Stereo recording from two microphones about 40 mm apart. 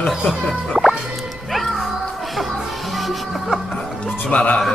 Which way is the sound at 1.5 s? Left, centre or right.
Centre.